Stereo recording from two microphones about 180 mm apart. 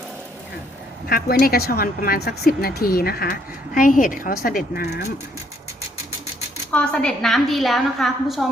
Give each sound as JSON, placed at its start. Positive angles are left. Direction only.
{"t": 1.0, "sound": "a woman's voice", "side_deg": 55}
{"t": 6.7, "sound": "a woman's voice", "side_deg": 5}